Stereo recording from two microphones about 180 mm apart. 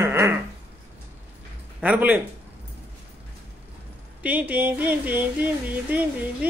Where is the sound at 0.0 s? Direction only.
15° right (ahead or behind).